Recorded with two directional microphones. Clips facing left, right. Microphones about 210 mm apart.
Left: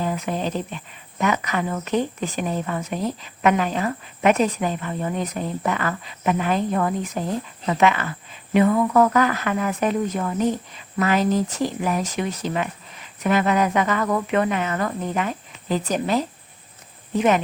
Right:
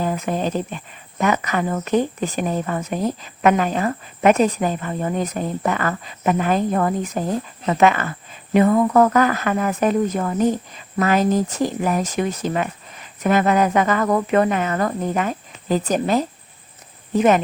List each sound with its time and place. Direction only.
0.0 s speech: 45° right (ahead or behind)